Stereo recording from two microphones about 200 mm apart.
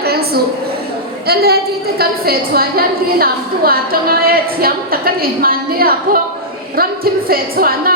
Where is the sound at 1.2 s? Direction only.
50° right (ahead or behind).